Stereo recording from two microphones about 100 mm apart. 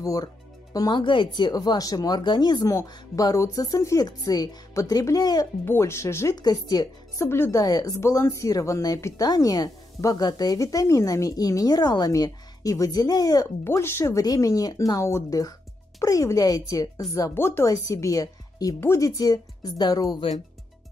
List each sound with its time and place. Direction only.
0.0 s a woman's voice: 40° left (ahead or behind)
2.7 s a woman's voice: 35° left (ahead or behind)
5.7 s speech: 25° left (ahead or behind)
6.3 s a woman's voice: 40° left (ahead or behind)
7.2 s speech: 25° left (ahead or behind)
7.5 s a woman's voice: 40° left (ahead or behind)
13.7 s speech: 25° left (ahead or behind)
14.2 s a woman's voice: 35° left (ahead or behind)
15.0 s a woman's voice: 30° left (ahead or behind)
17.3 s a woman's voice: 25° left (ahead or behind); by 20.2 s 40° left (ahead or behind)